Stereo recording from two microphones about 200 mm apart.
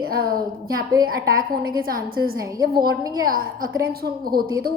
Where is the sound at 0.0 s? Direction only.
50° right (ahead or behind).